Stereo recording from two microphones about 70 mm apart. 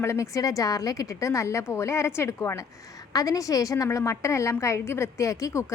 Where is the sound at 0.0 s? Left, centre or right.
Left.